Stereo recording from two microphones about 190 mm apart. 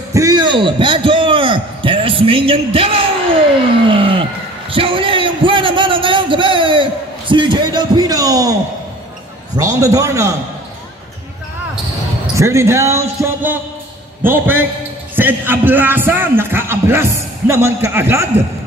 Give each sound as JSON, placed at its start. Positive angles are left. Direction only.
{"t": 0.1, "sound": "a sound", "side_deg": -20}
{"t": 9.6, "sound": "a man's voice", "side_deg": -15}
{"t": 12.4, "sound": "a man's voice", "side_deg": -15}